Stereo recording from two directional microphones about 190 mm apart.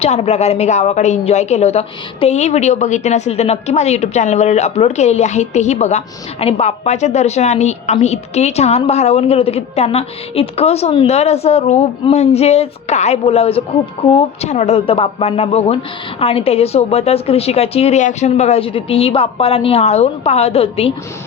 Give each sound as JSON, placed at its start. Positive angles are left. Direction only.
{"t": 0.0, "sound": "a woman's voice", "side_deg": 35}